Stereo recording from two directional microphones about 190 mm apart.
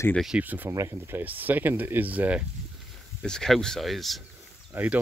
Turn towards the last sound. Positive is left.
turn(degrees=-5)  # may be behind; listen again after turning